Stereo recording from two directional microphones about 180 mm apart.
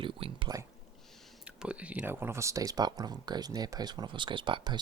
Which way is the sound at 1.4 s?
5° right (ahead or behind).